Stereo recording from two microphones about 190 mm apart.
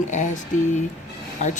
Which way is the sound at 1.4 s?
40° left (ahead or behind).